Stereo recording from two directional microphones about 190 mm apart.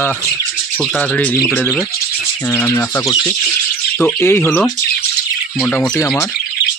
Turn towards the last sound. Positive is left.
turn(degrees=10)  # may be behind; listen again after turning